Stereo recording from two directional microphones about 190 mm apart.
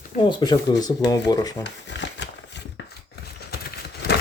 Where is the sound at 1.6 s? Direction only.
65° left (ahead or behind).